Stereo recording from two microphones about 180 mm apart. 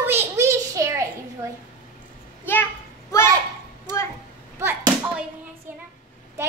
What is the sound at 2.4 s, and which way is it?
Children playing, 10° left (ahead or behind).